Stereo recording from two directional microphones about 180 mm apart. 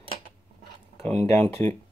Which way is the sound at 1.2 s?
10° left (ahead or behind).